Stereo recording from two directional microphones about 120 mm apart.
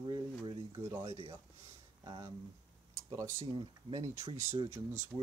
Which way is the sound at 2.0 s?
40° right (ahead or behind).